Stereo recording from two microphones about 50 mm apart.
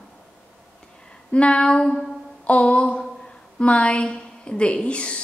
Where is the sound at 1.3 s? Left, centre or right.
Left.